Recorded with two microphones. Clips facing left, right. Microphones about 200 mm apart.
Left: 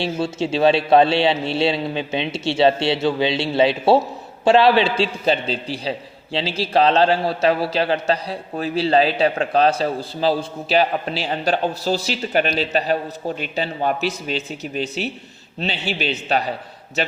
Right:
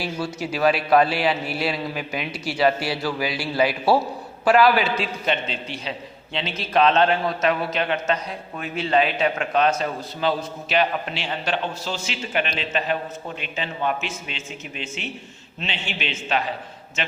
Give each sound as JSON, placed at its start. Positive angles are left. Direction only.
{"t": 0.0, "sound": "a man's voice", "side_deg": 25}